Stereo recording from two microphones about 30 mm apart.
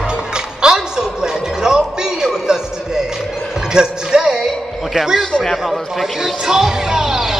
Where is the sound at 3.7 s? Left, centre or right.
Right.